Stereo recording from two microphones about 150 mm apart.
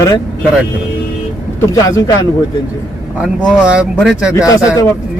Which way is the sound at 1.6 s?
20° left (ahead or behind).